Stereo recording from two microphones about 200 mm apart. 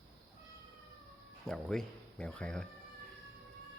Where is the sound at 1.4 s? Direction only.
Centre (ahead or behind).